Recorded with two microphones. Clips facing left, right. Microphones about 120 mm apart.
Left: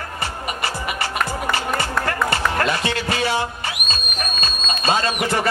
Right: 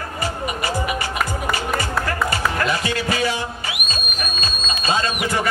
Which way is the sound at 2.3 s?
30° left (ahead or behind).